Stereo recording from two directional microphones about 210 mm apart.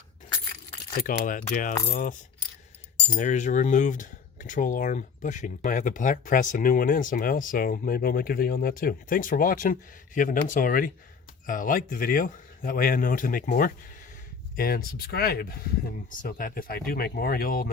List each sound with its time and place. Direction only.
0.9 s speech: 40° left (ahead or behind)
3.2 s speech: 35° left (ahead or behind)